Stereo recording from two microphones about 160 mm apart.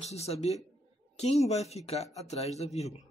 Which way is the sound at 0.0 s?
40° left (ahead or behind).